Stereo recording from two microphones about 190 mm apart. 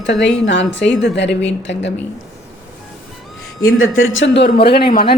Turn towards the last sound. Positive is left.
turn(degrees=30)  # may be behind; listen again after turning